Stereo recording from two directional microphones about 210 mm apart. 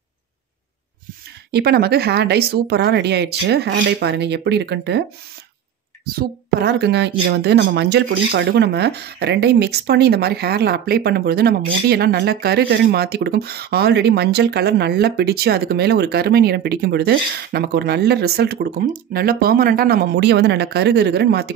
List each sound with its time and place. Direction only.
1.5 s speech: 50° right (ahead or behind)
6.1 s speech: 50° right (ahead or behind)